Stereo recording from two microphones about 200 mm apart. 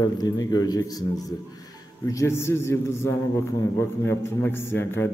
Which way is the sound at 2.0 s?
15° left (ahead or behind).